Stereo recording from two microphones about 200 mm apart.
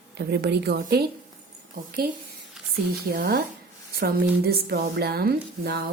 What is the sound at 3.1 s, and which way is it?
A woman's voice, 50° right (ahead or behind).